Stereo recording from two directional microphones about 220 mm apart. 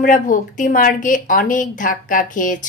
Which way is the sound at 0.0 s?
35° left (ahead or behind).